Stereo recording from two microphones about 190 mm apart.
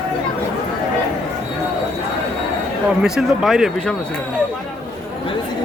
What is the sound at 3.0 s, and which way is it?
Speech, centre (ahead or behind).